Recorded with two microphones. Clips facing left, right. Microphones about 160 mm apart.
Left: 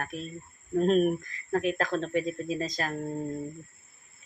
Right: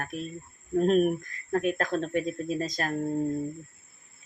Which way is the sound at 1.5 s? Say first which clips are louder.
Right 1 dB; 50° right (ahead or behind).